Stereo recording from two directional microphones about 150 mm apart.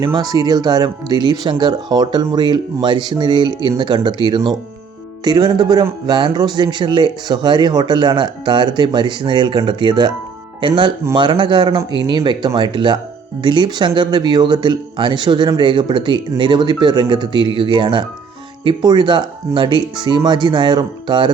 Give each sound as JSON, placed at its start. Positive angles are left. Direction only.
{"t": 0.0, "sound": "speech", "side_deg": -25}